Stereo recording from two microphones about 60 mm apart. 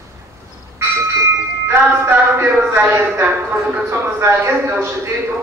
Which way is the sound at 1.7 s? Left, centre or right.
Right.